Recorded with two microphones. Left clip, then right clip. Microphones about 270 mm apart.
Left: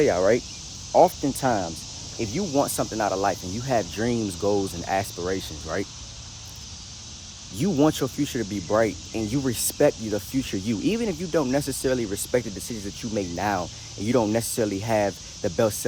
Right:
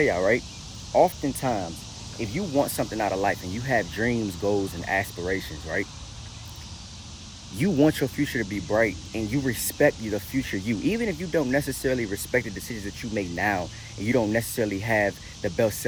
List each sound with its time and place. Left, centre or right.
0.0 s speech: left
7.6 s speech: centre